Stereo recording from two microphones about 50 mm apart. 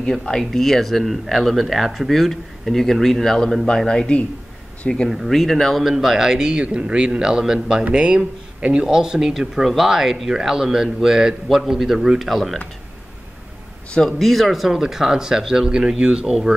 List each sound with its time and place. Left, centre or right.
0.0 s speech: centre
5.3 s speech: centre
13.9 s speech: centre